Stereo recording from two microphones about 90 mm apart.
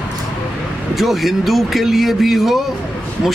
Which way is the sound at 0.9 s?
Centre (ahead or behind).